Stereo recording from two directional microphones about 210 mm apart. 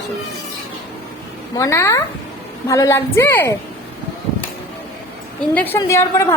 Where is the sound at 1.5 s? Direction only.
15° left (ahead or behind).